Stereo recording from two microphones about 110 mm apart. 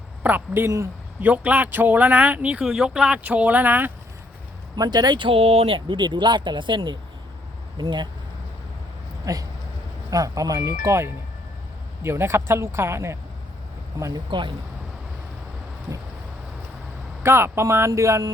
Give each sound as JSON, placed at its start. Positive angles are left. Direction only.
{"t": 0.2, "sound": "speech", "side_deg": -15}
{"t": 4.8, "sound": "speech", "side_deg": -40}
{"t": 9.2, "sound": "speech", "side_deg": -35}
{"t": 14.3, "sound": "speech", "side_deg": -45}
{"t": 17.2, "sound": "speech", "side_deg": -20}